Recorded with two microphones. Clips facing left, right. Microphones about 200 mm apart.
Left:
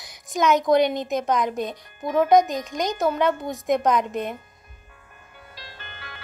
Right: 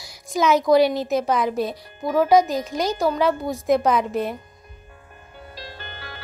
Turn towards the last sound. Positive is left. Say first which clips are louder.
# right 5 dB
turn(degrees=-35)  # may be behind; listen again after turning